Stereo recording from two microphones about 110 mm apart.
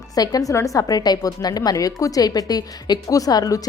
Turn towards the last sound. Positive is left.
turn(degrees=35)  # may be behind; listen again after turning